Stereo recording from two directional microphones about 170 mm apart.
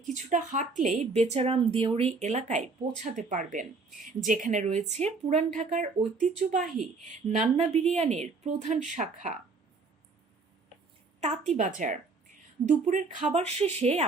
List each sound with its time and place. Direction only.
0.0 s a woman's voice: 45° right (ahead or behind)
11.2 s a woman's voice: 40° right (ahead or behind)